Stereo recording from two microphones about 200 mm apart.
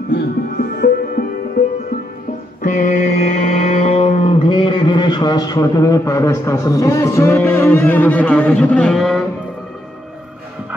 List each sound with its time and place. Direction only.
0.1 s music: 50° left (ahead or behind)
2.6 s mantra: 40° left (ahead or behind); by 9.2 s centre (ahead or behind)